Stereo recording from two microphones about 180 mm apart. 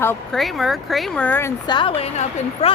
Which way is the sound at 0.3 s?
Centre (ahead or behind).